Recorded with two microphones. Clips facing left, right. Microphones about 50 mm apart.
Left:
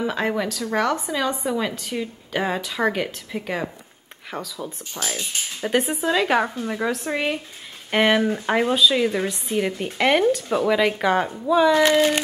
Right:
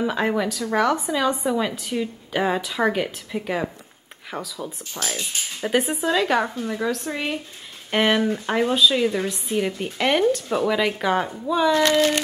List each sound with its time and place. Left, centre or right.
0.0 s a woman's voice: centre
11.8 s speech: centre